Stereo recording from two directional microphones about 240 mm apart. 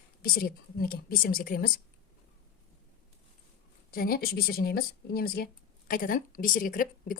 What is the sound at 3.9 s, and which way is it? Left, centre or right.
Speech, left.